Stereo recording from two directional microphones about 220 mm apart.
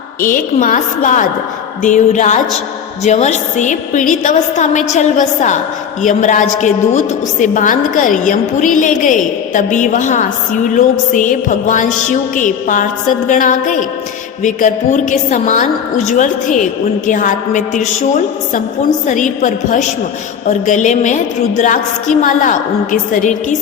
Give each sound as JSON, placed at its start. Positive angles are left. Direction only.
{"t": 0.2, "sound": "a woman's voice", "side_deg": 35}
{"t": 19.0, "sound": "a woman's voice", "side_deg": 35}